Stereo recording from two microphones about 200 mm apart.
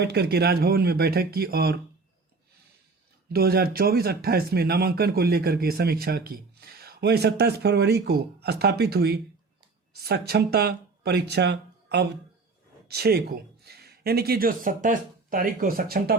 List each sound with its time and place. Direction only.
0.0 s speech: 55° right (ahead or behind)
3.3 s speech: 50° right (ahead or behind)